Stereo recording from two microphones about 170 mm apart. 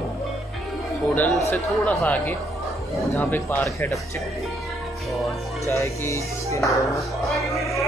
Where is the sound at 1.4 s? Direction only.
15° left (ahead or behind).